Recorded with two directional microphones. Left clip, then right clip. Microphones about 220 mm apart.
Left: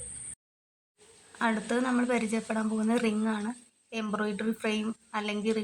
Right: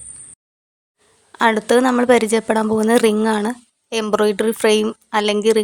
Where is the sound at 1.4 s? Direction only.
50° right (ahead or behind).